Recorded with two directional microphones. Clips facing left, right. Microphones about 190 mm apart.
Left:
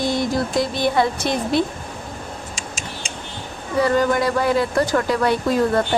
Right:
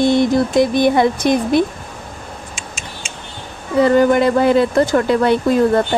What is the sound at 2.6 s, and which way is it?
Tick-tock, 35° left (ahead or behind).